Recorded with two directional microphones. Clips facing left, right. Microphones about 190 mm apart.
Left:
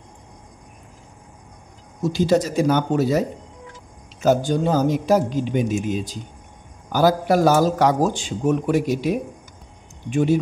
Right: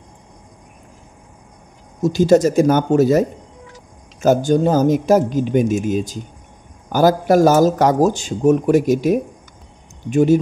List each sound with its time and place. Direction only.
2.0 s speech: 45° right (ahead or behind)